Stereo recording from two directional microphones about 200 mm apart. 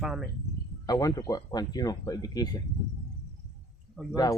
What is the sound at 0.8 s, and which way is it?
Speech, 20° left (ahead or behind).